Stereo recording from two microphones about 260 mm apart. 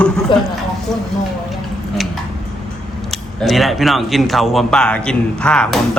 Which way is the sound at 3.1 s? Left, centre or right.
Centre.